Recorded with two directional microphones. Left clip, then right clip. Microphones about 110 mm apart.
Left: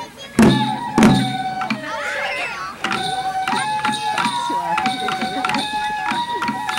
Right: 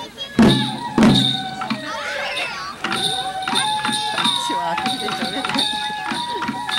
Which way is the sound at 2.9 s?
20° left (ahead or behind).